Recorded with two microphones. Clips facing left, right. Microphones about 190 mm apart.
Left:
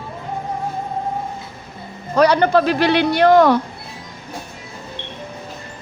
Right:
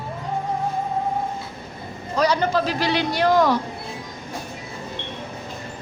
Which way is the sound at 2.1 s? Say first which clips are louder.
Left 6 dB; 65° left (ahead or behind).